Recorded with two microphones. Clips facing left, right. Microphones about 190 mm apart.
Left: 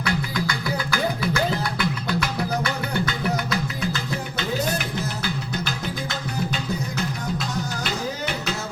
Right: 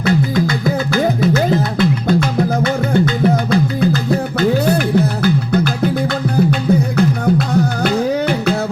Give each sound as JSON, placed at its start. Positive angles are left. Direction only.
{"t": 0.0, "sound": "music", "side_deg": -25}
{"t": 1.8, "sound": "music", "side_deg": -25}
{"t": 4.6, "sound": "music", "side_deg": -60}